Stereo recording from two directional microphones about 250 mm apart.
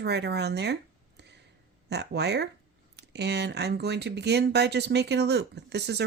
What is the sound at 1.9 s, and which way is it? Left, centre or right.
Speech, right.